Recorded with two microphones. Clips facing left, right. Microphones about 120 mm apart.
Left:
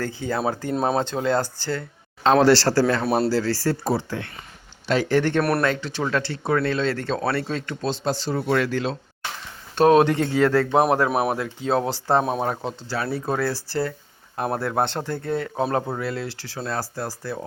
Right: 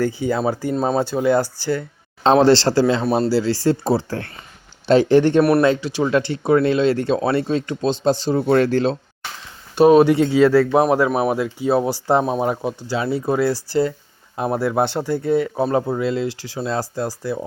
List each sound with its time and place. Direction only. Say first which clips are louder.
0.0 s speech: right 5 dB; 15° right (ahead or behind)
2.2 s a man's voice: right 3 dB; 25° right (ahead or behind)
3.0 s speech: right 3 dB; 5° left (ahead or behind)
3.2 s speech: right 4 dB; 15° right (ahead or behind)
3.9 s speech: right 4 dB; 35° right (ahead or behind)
4.9 s a man's voice: right 7 dB; 25° right (ahead or behind)
5.4 s speech: right 7 dB; 5° right (ahead or behind)
5.6 s speech: right 6 dB; 15° right (ahead or behind)
8.5 s speech: right 7 dB; 30° right (ahead or behind)
9.7 s speech: right 4 dB; 5° right (ahead or behind)
11.3 s speech: right 4 dB; 10° right (ahead or behind)
12.2 s speech: right 4 dB; centre (ahead or behind)
12.5 s speech: right 5 dB; 15° right (ahead or behind)